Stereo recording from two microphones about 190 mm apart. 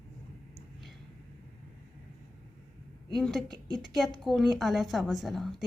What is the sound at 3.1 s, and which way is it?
A woman's voice, centre (ahead or behind).